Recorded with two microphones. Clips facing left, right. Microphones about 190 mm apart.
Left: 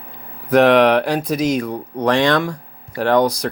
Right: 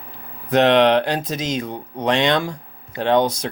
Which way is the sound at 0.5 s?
25° right (ahead or behind).